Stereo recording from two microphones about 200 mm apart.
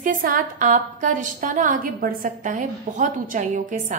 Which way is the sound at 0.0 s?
45° right (ahead or behind).